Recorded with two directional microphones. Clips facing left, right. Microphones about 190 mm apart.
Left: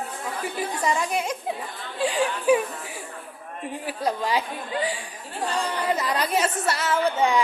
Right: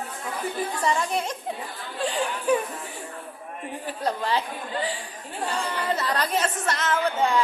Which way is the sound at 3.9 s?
10° left (ahead or behind).